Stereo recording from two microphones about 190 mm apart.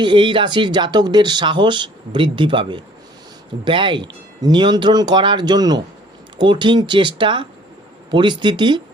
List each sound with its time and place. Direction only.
0.0 s speech: 25° right (ahead or behind)